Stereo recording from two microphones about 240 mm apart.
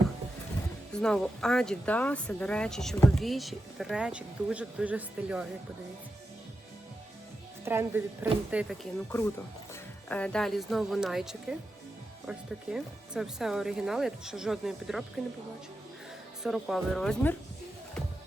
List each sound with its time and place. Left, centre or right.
0.9 s speech: centre
7.6 s speech: centre
10.1 s speech: centre
16.4 s speech: centre